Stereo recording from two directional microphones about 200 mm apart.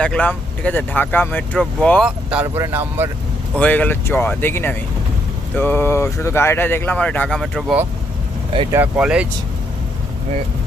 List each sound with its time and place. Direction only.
0.0 s speech: 5° left (ahead or behind); by 3.1 s 10° right (ahead or behind)
3.6 s speech: 10° left (ahead or behind)